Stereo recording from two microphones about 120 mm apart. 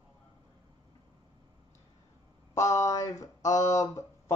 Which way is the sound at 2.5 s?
25° left (ahead or behind).